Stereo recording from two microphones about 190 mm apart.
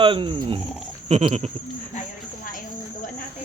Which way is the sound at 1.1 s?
35° right (ahead or behind).